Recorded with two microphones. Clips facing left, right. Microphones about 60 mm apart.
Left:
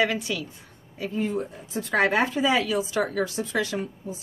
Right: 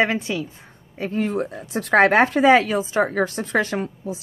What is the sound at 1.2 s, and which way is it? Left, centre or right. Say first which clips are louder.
Speech: right 4 dB; right.